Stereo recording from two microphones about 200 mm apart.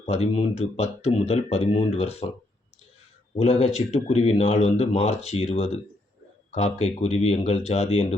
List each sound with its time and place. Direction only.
0.0 s speech: 30° left (ahead or behind)
3.3 s speech: 35° left (ahead or behind)